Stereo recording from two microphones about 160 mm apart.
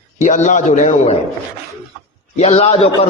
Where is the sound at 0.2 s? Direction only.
50° left (ahead or behind).